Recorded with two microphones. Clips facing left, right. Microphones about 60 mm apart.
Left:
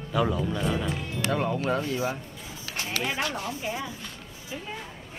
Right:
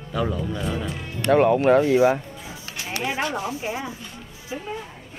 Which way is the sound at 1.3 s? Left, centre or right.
Right.